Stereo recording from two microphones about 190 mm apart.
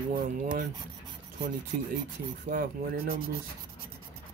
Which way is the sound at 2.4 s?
50° right (ahead or behind).